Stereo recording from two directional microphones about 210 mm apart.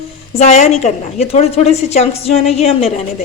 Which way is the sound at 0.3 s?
30° left (ahead or behind).